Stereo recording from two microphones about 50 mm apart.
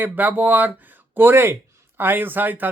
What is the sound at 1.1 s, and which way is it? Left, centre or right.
Speech, right.